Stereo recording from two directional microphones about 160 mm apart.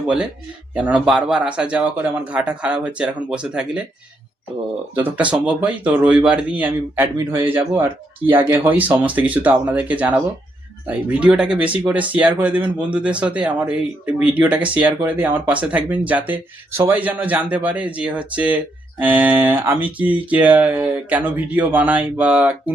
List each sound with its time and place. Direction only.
0.7 s speech: 10° right (ahead or behind)
4.9 s speech: 10° right (ahead or behind)